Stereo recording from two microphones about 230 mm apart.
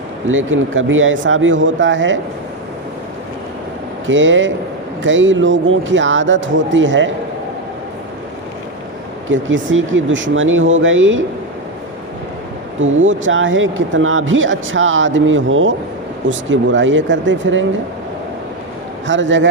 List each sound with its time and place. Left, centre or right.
0.3 s speech: right
4.0 s speech: right
9.3 s speech: right
12.8 s speech: right
19.0 s a man's voice: right